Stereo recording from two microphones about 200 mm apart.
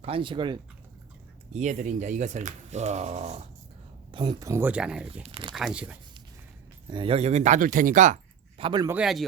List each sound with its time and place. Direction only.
0.0 s speech: 25° right (ahead or behind)
1.5 s speech: 35° right (ahead or behind)
4.1 s speech: 25° right (ahead or behind); by 5.2 s 5° right (ahead or behind)
5.2 s speech: 25° right (ahead or behind)
5.5 s speech: 5° right (ahead or behind)
6.9 s speech: 25° right (ahead or behind)
8.6 s speech: 20° right (ahead or behind)
8.9 s speech: 5° right (ahead or behind)